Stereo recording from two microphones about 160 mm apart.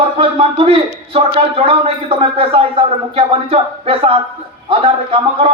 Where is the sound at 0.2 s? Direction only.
35° right (ahead or behind).